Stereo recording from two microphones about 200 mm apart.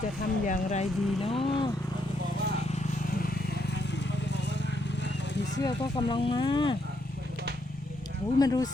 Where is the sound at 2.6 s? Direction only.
35° left (ahead or behind); by 5.5 s 60° left (ahead or behind).